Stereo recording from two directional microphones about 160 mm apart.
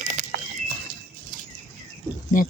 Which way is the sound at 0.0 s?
50° right (ahead or behind).